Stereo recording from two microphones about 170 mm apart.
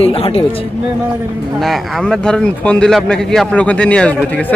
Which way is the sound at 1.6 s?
Centre (ahead or behind).